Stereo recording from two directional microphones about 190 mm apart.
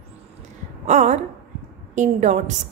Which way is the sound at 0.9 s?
35° right (ahead or behind).